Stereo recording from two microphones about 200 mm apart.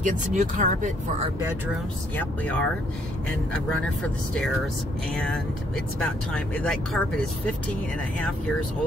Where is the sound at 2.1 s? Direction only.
10° left (ahead or behind).